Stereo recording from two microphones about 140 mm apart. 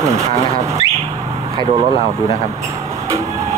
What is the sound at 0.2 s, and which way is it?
Speech, 45° right (ahead or behind).